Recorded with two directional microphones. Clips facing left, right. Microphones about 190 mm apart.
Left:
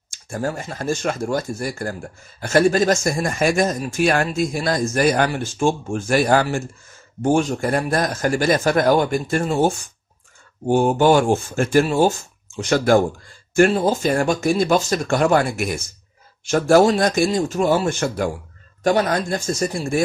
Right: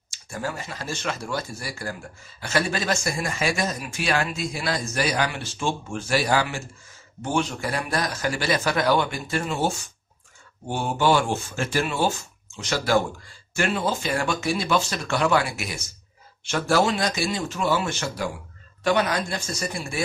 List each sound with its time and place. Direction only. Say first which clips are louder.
0.1 s speech: left 6 dB; 45° left (ahead or behind)
13.6 s speech: left 9 dB; 40° left (ahead or behind)